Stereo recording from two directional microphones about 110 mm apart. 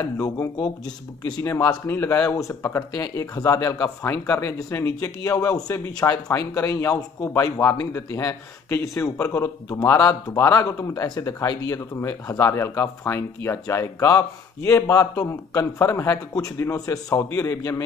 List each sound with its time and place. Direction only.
0.0 s speech: 30° left (ahead or behind)